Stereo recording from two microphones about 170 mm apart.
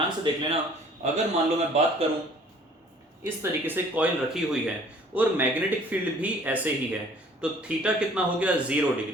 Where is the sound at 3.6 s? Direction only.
5° right (ahead or behind).